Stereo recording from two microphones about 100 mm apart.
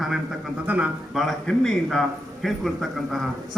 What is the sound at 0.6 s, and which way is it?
Speech, 15° right (ahead or behind).